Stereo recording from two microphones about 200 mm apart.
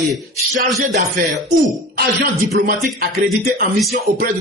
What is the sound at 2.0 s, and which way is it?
Speech, 50° right (ahead or behind).